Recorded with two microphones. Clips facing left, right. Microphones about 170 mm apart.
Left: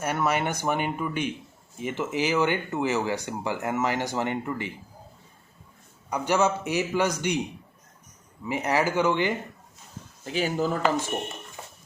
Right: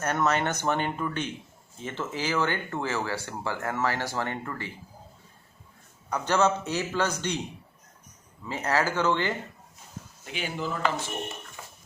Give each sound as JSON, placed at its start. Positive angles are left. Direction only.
{"t": 0.0, "sound": "speech", "side_deg": 10}
{"t": 6.1, "sound": "speech", "side_deg": 15}
{"t": 8.4, "sound": "speech", "side_deg": 15}
{"t": 10.2, "sound": "speech", "side_deg": 40}